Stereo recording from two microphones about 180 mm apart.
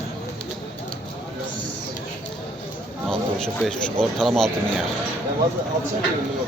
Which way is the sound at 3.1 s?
5° left (ahead or behind).